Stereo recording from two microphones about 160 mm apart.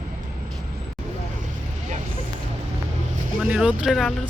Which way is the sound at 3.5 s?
5° right (ahead or behind).